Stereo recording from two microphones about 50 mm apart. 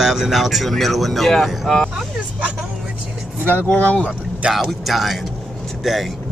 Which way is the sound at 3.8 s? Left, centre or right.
Left.